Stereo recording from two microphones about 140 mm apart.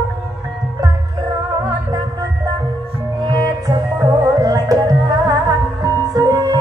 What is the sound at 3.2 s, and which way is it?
Music, 25° right (ahead or behind).